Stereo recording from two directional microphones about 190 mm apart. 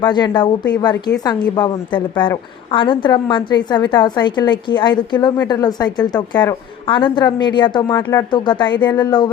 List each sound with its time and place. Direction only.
0.0 s a woman's voice: 25° left (ahead or behind)
6.3 s speech: 10° left (ahead or behind)
6.8 s a woman's voice: 25° left (ahead or behind)